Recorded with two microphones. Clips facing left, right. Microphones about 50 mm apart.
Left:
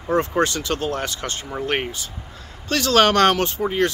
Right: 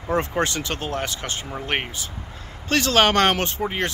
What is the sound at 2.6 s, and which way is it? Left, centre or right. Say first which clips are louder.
Speech: left 2 dB; right.